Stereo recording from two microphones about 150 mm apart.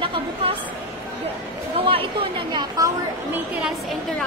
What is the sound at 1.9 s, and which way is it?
Speech, 35° right (ahead or behind).